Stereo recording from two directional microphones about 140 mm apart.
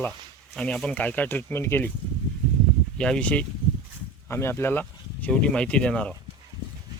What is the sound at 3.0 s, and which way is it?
Speech, 5° left (ahead or behind).